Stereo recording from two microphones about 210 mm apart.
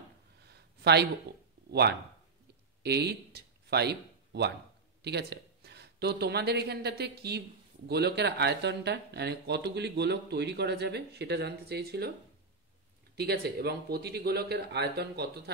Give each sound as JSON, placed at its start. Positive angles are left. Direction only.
{"t": 0.5, "sound": "a sound", "side_deg": -50}
{"t": 1.7, "sound": "speech", "side_deg": -50}
{"t": 13.1, "sound": "speech", "side_deg": -50}